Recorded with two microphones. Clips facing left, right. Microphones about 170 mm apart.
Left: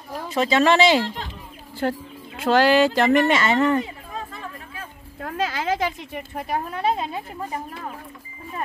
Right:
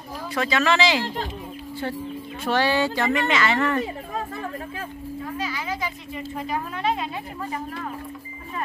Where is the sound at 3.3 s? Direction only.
25° left (ahead or behind).